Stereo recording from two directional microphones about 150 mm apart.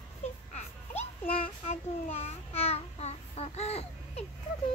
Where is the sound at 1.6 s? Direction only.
45° left (ahead or behind).